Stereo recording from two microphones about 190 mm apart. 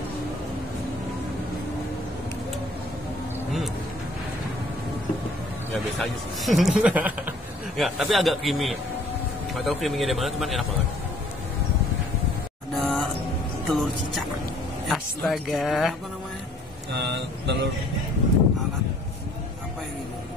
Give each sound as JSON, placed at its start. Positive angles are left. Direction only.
{"t": 5.9, "sound": "speech", "side_deg": 0}
{"t": 12.8, "sound": "music", "side_deg": 5}
{"t": 13.7, "sound": "speech", "side_deg": 0}
{"t": 16.9, "sound": "speech", "side_deg": -65}